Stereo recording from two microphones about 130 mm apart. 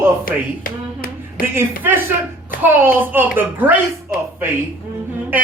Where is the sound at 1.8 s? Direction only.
15° right (ahead or behind).